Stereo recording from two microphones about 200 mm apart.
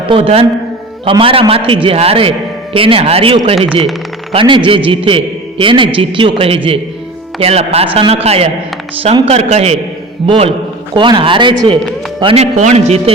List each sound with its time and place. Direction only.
0.1 s a man's voice: 30° right (ahead or behind)